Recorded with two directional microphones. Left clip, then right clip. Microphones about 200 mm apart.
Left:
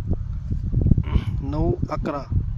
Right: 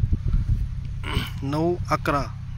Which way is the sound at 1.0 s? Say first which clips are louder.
Right 3 dB; 5° right (ahead or behind).